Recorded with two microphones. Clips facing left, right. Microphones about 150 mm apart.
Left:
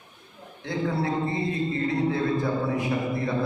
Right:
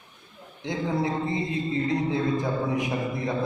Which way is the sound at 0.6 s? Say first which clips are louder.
Even; 20° right (ahead or behind).